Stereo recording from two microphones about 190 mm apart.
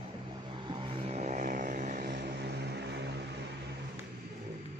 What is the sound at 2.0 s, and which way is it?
Vehicle, 60° right (ahead or behind).